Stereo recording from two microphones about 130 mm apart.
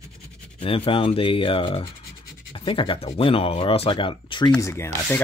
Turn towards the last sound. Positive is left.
turn(degrees=20)  # may be behind; listen again after turning